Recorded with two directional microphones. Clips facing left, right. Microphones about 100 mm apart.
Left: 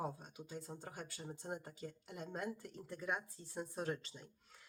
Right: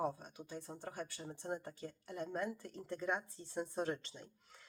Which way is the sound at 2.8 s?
5° left (ahead or behind).